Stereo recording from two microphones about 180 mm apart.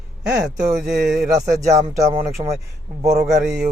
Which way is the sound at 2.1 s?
35° right (ahead or behind).